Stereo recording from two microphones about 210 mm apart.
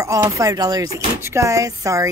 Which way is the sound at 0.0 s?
15° right (ahead or behind).